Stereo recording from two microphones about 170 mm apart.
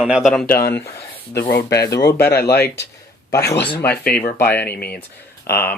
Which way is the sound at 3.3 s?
15° left (ahead or behind).